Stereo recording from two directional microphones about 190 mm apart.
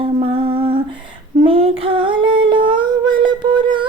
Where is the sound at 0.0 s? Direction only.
30° right (ahead or behind).